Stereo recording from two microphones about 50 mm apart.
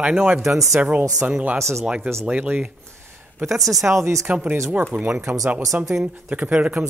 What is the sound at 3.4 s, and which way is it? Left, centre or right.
Speech, centre.